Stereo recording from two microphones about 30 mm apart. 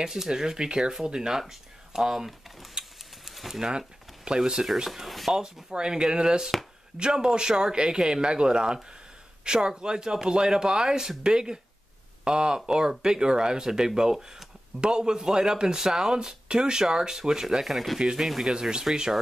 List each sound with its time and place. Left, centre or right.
0.0 s speech: centre
2.0 s speech: centre
3.3 s pigeon: centre
3.6 s a sound: right
4.8 s speech: centre
5.7 s speech: right
17.6 s speech: centre
17.9 s speech: right